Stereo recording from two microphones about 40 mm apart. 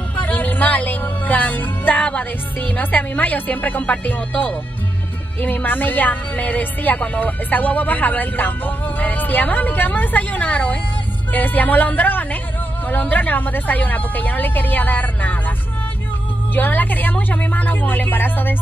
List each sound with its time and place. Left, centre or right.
0.1 s music: left
2.1 s speech: left
16.5 s speech: left